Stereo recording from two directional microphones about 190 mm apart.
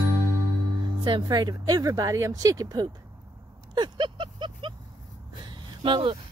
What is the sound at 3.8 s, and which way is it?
Vehicle, 25° right (ahead or behind).